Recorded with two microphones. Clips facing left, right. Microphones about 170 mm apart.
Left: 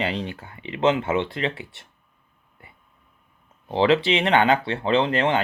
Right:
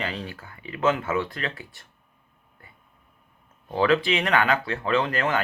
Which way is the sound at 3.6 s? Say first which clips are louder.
Left 2 dB; 25° left (ahead or behind).